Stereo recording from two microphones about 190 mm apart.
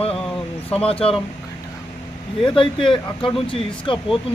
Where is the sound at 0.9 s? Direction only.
30° left (ahead or behind).